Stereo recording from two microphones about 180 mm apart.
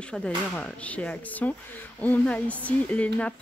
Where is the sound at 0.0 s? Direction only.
5° left (ahead or behind).